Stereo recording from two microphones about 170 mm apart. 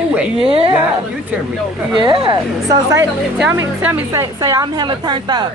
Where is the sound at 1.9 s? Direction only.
30° right (ahead or behind).